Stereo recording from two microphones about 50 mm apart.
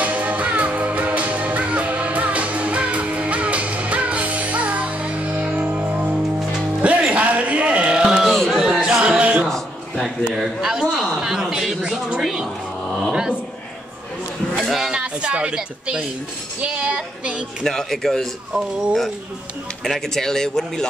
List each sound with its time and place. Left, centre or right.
0.0 s music: right
8.0 s a sound: centre
8.3 s a sound: centre
8.5 s chatter: centre
9.0 s music: right
10.2 s a man's voice: centre
14.6 s a sound: centre
14.9 s a woman's voice: right
17.6 s speech: centre
18.5 s a man's voice: centre
19.8 s speech: centre